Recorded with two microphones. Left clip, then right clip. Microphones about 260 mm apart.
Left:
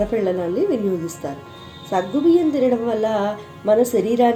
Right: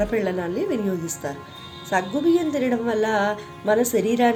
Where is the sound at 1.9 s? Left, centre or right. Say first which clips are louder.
Left 3 dB; right.